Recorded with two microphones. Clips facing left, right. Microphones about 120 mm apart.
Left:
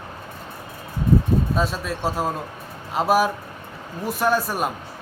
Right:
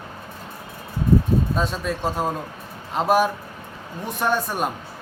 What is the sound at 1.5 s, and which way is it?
Speech, 5° left (ahead or behind).